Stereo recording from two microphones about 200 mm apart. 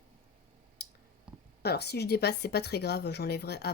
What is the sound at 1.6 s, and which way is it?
A woman's voice, 55° left (ahead or behind).